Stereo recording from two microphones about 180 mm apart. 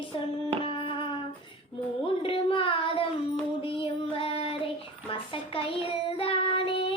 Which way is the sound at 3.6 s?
30° left (ahead or behind).